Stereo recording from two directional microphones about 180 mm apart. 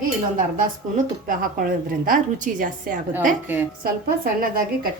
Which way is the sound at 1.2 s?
50° right (ahead or behind).